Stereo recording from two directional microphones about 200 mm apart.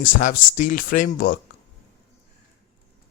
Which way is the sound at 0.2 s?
40° left (ahead or behind).